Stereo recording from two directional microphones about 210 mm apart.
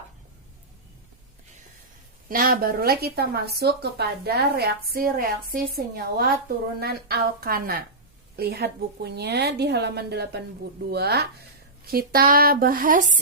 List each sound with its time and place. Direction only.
2.3 s speech: 45° right (ahead or behind)